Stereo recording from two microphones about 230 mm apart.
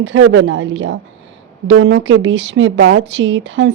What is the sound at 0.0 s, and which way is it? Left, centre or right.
A woman's voice, right.